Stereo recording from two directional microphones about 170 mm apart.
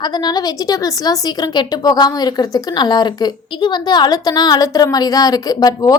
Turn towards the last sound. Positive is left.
turn(degrees=20)  # may be behind; listen again after turning